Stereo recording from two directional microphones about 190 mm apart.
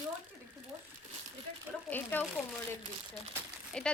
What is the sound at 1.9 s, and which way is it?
Speech, 10° left (ahead or behind).